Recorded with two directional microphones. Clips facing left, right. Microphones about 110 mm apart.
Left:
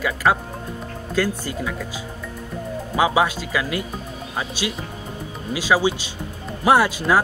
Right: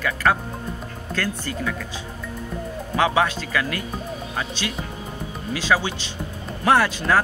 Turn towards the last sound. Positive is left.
turn(degrees=15)  # may be behind; listen again after turning